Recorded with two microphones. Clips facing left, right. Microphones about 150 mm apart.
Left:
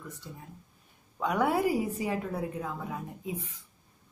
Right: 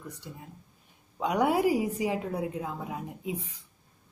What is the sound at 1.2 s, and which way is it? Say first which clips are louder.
A woman's voice: right 2 dB; 20° right (ahead or behind).